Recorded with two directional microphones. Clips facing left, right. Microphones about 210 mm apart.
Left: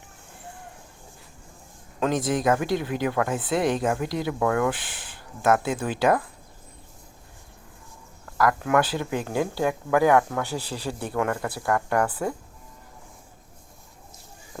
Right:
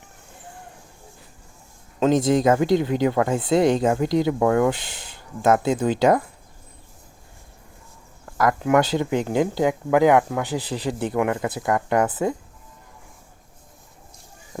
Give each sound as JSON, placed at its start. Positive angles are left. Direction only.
{"t": 2.0, "sound": "speech", "side_deg": -25}
{"t": 8.4, "sound": "speech", "side_deg": -20}
{"t": 14.5, "sound": "speech", "side_deg": -20}